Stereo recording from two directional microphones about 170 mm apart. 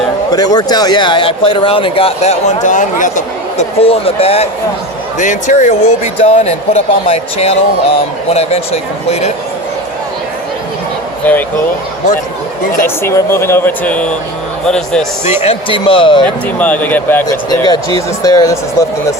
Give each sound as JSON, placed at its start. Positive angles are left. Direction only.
{"t": 0.3, "sound": "speech", "side_deg": 25}
{"t": 5.2, "sound": "speech", "side_deg": 45}
{"t": 11.3, "sound": "speech", "side_deg": 10}
{"t": 12.8, "sound": "speech", "side_deg": 15}
{"t": 15.2, "sound": "speech", "side_deg": 40}
{"t": 16.6, "sound": "speech", "side_deg": 10}
{"t": 17.2, "sound": "speech", "side_deg": 20}